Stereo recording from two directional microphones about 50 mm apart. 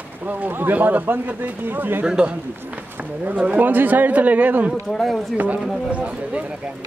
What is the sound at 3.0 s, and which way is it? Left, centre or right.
Speech, right.